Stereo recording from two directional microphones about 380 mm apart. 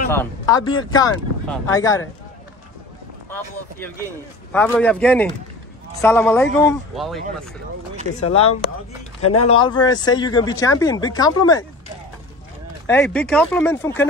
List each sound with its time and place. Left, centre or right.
0.1 s speech: centre
3.3 s speech: centre
8.3 s speech: centre
9.2 s speech: left
9.5 s speech: centre
12.8 s speech: centre